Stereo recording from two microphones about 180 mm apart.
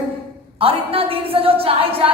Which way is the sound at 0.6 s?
30° right (ahead or behind).